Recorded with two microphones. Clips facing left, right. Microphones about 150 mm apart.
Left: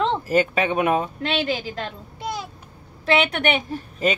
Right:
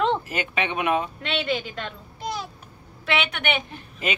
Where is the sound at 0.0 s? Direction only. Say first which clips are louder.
Left 4 dB; 40° left (ahead or behind).